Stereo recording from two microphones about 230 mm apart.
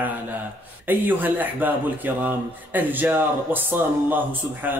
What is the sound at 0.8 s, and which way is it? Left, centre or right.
Speech, centre.